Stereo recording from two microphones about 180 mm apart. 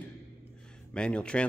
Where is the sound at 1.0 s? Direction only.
5° left (ahead or behind).